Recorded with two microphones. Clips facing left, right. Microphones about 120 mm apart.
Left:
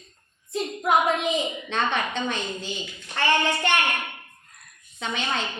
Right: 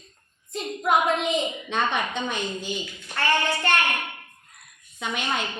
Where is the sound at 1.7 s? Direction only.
10° right (ahead or behind).